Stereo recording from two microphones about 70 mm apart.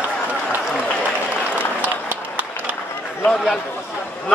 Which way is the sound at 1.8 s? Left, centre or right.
Right.